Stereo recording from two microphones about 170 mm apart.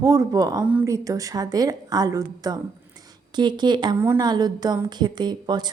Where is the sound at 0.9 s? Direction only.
20° right (ahead or behind).